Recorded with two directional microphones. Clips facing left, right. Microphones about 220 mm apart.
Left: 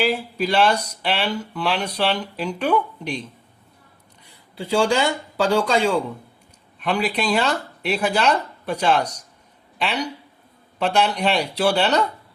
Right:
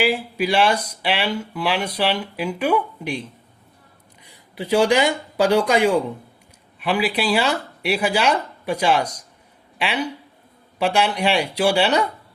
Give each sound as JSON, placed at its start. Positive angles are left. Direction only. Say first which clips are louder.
{"t": 0.0, "sound": "speech", "louder": "right 1 dB", "side_deg": -10}
{"t": 4.5, "sound": "speech", "louder": "right 2 dB", "side_deg": -20}
{"t": 6.7, "sound": "speech", "louder": "right 1 dB", "side_deg": -5}